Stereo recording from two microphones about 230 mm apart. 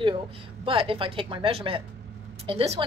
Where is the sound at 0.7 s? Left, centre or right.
Right.